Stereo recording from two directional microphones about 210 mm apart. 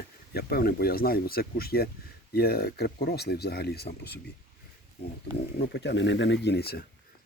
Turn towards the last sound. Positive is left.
turn(degrees=50)  # may be behind; listen again after turning